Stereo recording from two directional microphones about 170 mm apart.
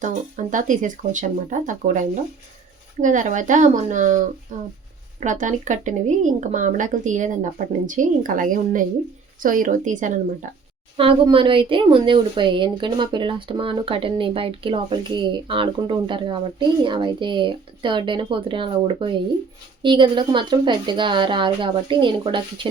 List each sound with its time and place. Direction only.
0.0 s speech: 45° right (ahead or behind)
10.9 s speech: 30° right (ahead or behind)